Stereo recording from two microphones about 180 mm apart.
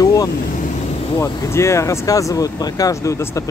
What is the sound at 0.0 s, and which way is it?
Vehicle, 20° left (ahead or behind).